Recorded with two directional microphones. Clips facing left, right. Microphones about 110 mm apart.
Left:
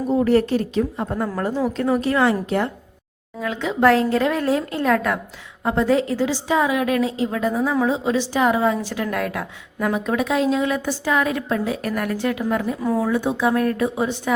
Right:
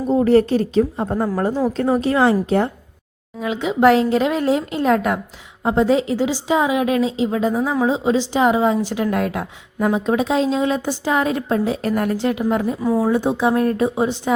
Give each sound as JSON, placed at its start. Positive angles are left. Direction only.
{"t": 0.1, "sound": "a woman's voice", "side_deg": -30}
{"t": 3.4, "sound": "a woman's voice", "side_deg": -15}